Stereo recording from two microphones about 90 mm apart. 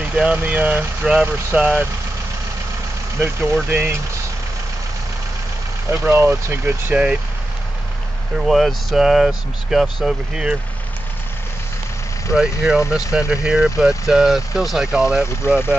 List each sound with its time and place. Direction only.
0.0 s speech: 10° right (ahead or behind)
3.7 s speech: 25° right (ahead or behind)
5.9 s speech: 25° right (ahead or behind)
8.4 s speech: centre (ahead or behind)
12.4 s speech: 5° right (ahead or behind)
15.4 s speech: 25° left (ahead or behind)